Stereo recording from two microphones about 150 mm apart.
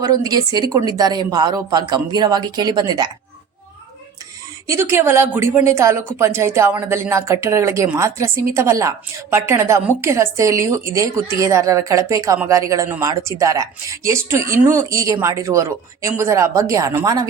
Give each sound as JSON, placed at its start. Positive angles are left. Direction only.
{"t": 0.0, "sound": "speech", "side_deg": -25}
{"t": 4.7, "sound": "a woman's voice", "side_deg": -20}